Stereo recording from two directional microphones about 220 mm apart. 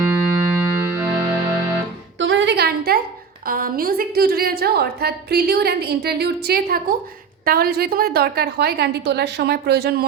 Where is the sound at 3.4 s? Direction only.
40° right (ahead or behind).